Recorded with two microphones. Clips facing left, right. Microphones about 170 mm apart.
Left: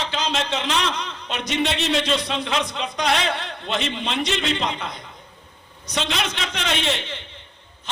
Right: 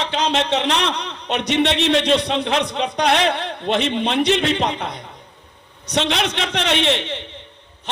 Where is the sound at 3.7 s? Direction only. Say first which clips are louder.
Right 6 dB; 60° right (ahead or behind).